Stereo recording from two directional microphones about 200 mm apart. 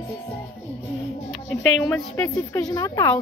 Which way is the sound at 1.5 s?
5° left (ahead or behind).